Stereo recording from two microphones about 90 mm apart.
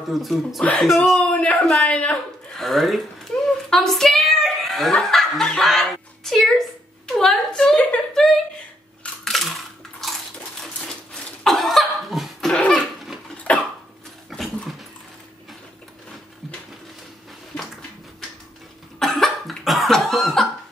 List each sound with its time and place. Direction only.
0.1 s speech: centre (ahead or behind)
1.2 s speech: 15° left (ahead or behind)
2.6 s a woman's voice: centre (ahead or behind)
7.2 s a sound: 5° left (ahead or behind)
9.2 s coin: 5° left (ahead or behind)
11.4 s cough: centre (ahead or behind)
12.5 s a sound: 15° left (ahead or behind)
13.5 s cough: 15° left (ahead or behind)
14.3 s dog: 5° left (ahead or behind)
18.9 s cough: centre (ahead or behind)